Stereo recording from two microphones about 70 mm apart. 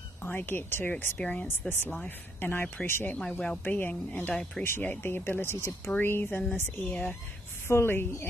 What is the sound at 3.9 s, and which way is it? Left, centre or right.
Speech, centre.